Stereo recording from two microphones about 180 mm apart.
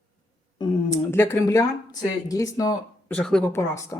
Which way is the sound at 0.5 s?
20° left (ahead or behind).